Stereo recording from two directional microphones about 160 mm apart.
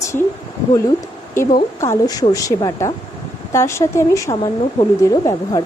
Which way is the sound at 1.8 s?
20° left (ahead or behind).